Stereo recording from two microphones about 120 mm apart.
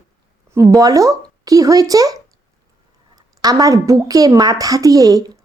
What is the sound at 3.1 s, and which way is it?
A woman's voice, 30° right (ahead or behind).